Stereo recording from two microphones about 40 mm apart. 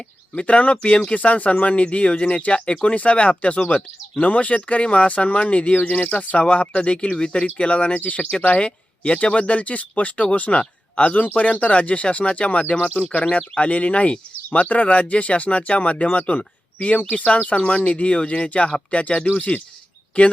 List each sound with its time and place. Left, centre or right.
0.3 s speech: left
1.1 s speech: left
5.9 s speech: left
6.1 s speech: left